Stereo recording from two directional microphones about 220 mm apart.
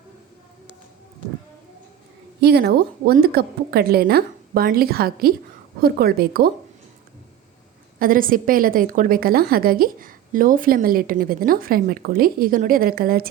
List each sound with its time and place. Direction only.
2.4 s speech: 45° right (ahead or behind)
7.9 s a woman's voice: 40° right (ahead or behind)